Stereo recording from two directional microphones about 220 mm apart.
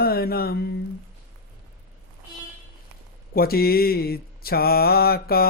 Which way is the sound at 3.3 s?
45° left (ahead or behind).